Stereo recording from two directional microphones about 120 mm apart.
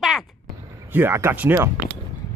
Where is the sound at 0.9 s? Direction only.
20° right (ahead or behind).